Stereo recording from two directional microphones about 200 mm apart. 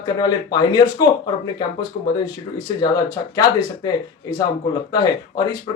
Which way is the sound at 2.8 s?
20° left (ahead or behind).